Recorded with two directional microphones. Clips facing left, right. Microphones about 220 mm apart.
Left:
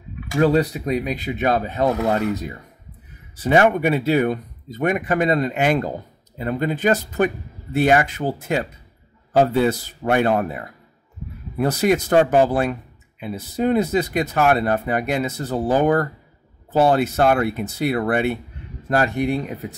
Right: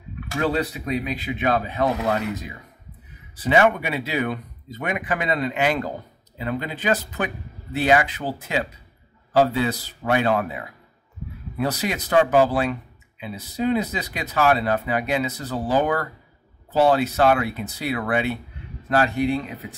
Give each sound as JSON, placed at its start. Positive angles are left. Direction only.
{"t": 0.4, "sound": "speech", "side_deg": 40}
{"t": 3.4, "sound": "speech", "side_deg": 45}